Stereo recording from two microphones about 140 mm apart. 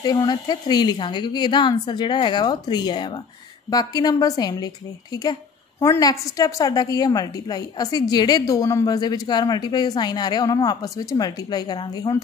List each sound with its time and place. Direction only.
0.0 s a woman's voice: 30° left (ahead or behind)